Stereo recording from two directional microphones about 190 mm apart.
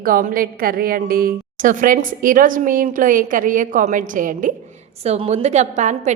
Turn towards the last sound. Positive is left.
turn(degrees=-40)  # may be behind; listen again after turning